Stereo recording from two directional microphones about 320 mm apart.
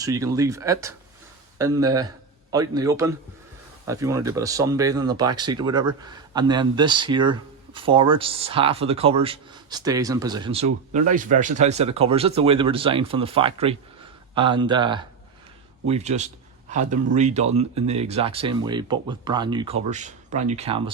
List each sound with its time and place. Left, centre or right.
0.0 s speech: centre